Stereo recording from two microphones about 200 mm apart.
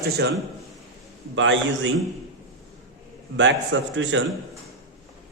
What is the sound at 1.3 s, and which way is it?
Speech, 70° right (ahead or behind).